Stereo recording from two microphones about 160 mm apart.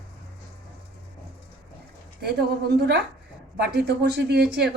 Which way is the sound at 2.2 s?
90° right.